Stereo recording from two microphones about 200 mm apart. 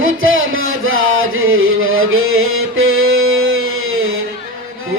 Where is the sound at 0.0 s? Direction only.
80° right.